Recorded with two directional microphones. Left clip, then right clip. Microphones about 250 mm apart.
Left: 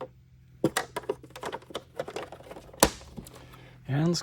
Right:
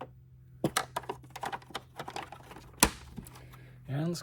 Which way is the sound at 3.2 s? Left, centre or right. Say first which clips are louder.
Left 4 dB; left.